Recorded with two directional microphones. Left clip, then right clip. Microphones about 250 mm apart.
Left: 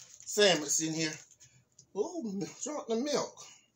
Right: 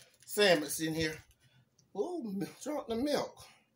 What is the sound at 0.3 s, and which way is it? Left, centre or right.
Speech, centre.